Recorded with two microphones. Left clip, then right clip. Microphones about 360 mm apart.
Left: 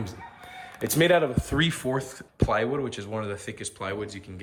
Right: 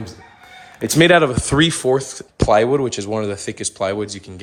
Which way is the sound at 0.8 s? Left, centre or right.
Right.